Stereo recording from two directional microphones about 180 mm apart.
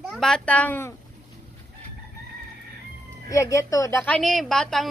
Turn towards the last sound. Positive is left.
turn(degrees=5)  # may be behind; listen again after turning